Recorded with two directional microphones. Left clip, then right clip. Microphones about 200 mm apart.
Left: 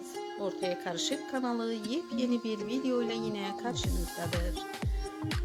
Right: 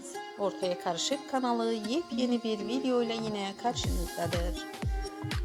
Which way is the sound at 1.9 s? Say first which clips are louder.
Right 2 dB; 35° left (ahead or behind).